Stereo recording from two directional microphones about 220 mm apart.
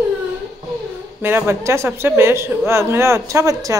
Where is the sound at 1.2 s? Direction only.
10° right (ahead or behind).